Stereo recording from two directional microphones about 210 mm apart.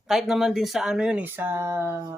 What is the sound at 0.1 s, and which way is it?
Speech, centre (ahead or behind).